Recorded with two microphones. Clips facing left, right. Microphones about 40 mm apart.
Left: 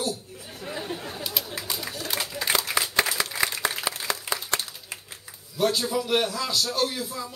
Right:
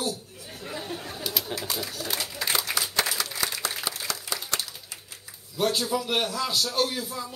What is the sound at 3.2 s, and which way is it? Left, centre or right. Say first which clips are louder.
Applause: left 4 dB; left.